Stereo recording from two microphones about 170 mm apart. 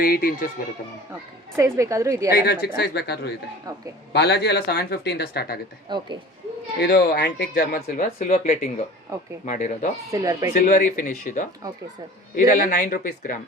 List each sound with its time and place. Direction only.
0.0 s speech: 55° left (ahead or behind)
1.5 s a woman's voice: 20° right (ahead or behind)
2.3 s speech: 65° left (ahead or behind)
3.7 s a woman's voice: 20° right (ahead or behind)
4.1 s speech: 70° left (ahead or behind)
5.9 s a woman's voice: 25° right (ahead or behind)
6.7 s speech: 90° left
7.5 s speech: 55° left (ahead or behind)
8.3 s speech: 40° left (ahead or behind)
9.1 s speech: 15° right (ahead or behind)
9.5 s speech: 45° left (ahead or behind)
10.1 s speech: 20° right (ahead or behind)
10.5 s speech: 50° left (ahead or behind)
12.5 s speech: 50° left (ahead or behind)